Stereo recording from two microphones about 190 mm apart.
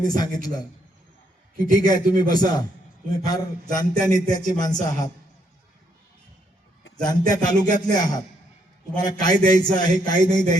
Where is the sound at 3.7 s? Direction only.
20° left (ahead or behind).